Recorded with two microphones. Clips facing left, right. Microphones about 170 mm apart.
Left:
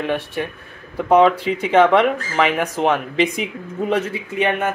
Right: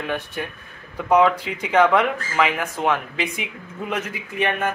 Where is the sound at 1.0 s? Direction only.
25° left (ahead or behind).